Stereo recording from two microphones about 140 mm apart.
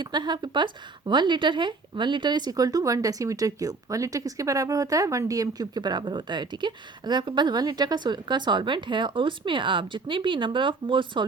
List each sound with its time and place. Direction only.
0.0 s speech: 30° right (ahead or behind)